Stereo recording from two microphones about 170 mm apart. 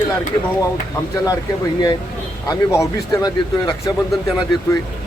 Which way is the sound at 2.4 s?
20° left (ahead or behind).